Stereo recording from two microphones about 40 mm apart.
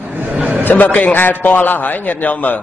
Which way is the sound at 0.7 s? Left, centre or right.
Left.